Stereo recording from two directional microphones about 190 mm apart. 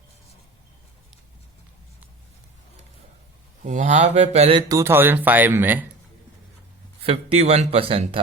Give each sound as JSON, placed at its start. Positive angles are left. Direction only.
{"t": 3.6, "sound": "speech", "side_deg": -40}
{"t": 4.7, "sound": "speech", "side_deg": -15}
{"t": 7.0, "sound": "speech", "side_deg": -30}